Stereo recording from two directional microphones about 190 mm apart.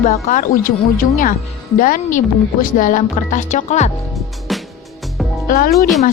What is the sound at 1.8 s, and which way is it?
A woman's voice, 45° left (ahead or behind).